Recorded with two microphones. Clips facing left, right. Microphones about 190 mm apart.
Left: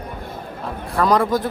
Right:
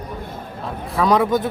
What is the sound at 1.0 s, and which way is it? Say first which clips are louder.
Speech: right 1 dB; centre (ahead or behind).